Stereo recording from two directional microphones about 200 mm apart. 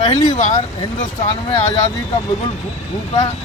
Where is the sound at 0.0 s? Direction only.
35° left (ahead or behind).